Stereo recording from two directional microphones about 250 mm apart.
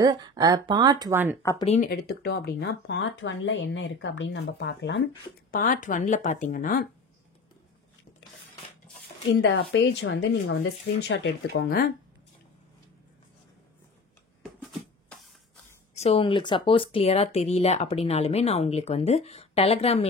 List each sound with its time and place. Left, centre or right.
0.0 s speech: centre
1.6 s speech: left
1.9 s speech: left
5.5 s speech: left
9.3 s speech: left
14.6 s a sound: centre
15.9 s speech: left